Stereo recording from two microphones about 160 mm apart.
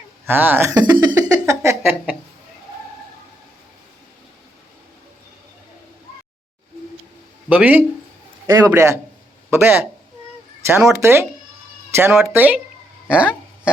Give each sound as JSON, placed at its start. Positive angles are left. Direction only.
{"t": 0.3, "sound": "speech", "side_deg": -10}
{"t": 0.9, "sound": "a sound", "side_deg": -20}
{"t": 7.5, "sound": "speech", "side_deg": -10}
{"t": 8.5, "sound": "a man's voice", "side_deg": -20}